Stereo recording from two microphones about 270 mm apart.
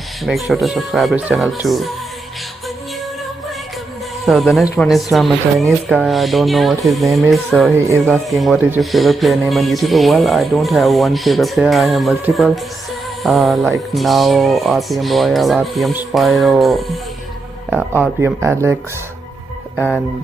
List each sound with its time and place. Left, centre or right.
0.2 s speech: centre
4.3 s speech: centre